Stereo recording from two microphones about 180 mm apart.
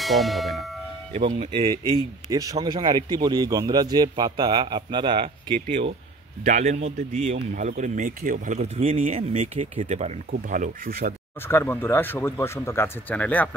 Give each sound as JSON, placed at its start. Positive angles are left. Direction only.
{"t": 0.0, "sound": "bell", "side_deg": 0}
{"t": 1.1, "sound": "a man's voice", "side_deg": -30}
{"t": 8.5, "sound": "speech", "side_deg": -35}
{"t": 10.3, "sound": "speech", "side_deg": -50}
{"t": 11.4, "sound": "speech", "side_deg": 10}